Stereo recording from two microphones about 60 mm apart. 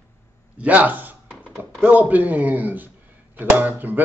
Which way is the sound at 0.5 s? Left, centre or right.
Right.